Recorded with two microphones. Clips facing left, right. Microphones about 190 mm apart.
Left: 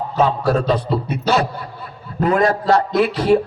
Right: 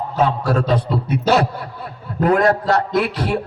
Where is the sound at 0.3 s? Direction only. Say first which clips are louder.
Left 1 dB; 55° right (ahead or behind).